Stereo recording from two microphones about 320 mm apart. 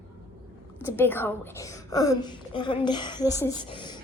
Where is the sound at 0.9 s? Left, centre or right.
Centre.